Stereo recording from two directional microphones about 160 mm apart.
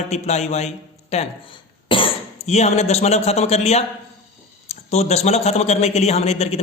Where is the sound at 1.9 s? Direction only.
35° left (ahead or behind).